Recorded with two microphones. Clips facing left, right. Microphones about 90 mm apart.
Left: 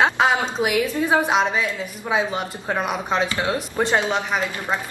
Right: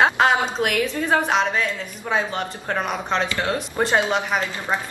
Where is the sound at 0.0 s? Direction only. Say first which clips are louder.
Right 1 dB; 5° left (ahead or behind).